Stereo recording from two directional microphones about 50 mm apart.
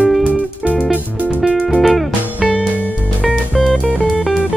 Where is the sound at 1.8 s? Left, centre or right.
Centre.